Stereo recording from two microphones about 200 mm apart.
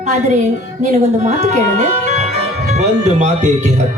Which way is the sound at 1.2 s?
35° right (ahead or behind).